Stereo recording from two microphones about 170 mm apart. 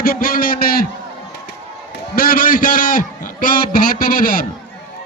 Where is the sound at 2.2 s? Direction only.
55° left (ahead or behind).